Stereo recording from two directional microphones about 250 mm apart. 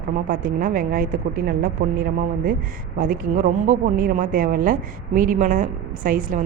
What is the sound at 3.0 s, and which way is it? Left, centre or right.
A woman's voice, right.